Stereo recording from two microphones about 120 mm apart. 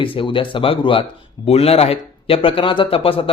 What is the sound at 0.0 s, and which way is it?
A man's voice, 45° left (ahead or behind).